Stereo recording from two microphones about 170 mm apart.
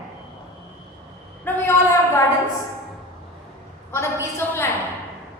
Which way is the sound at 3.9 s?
15° left (ahead or behind).